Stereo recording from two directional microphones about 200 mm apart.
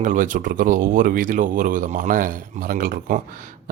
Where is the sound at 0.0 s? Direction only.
40° right (ahead or behind).